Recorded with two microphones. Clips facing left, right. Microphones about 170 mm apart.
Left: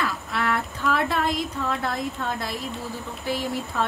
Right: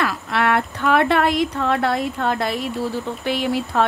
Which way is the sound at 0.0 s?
75° right (ahead or behind).